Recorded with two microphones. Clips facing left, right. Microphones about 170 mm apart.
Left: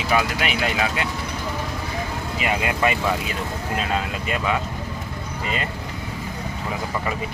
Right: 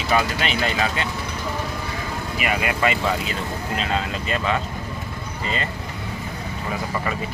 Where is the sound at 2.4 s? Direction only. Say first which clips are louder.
Even; 20° left (ahead or behind).